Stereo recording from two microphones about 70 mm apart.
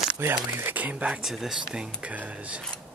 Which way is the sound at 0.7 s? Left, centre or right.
Right.